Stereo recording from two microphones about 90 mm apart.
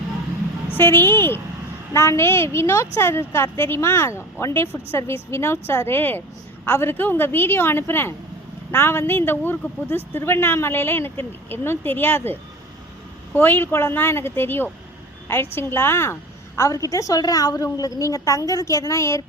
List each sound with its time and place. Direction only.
0.7 s a woman's voice: 25° left (ahead or behind)
16.6 s a woman's voice: 35° left (ahead or behind)